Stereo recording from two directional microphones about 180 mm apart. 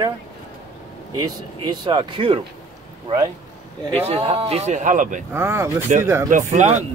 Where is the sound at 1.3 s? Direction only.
25° right (ahead or behind).